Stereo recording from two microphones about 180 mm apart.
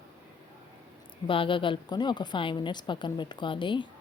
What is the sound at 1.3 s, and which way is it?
Speech, 30° left (ahead or behind).